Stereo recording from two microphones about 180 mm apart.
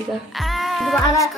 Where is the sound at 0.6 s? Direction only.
Centre (ahead or behind).